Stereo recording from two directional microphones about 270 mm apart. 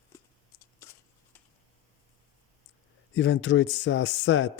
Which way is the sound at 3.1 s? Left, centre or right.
Left.